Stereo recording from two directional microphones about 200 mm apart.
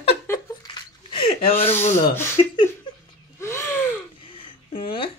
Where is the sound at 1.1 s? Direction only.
25° left (ahead or behind).